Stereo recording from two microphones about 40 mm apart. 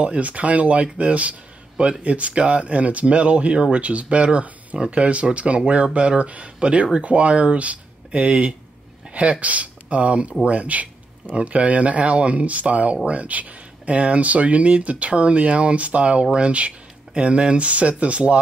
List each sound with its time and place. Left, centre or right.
0.0 s speech: right